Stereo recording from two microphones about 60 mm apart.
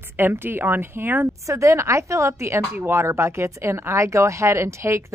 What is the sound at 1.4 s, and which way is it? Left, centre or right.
A woman's voice, right.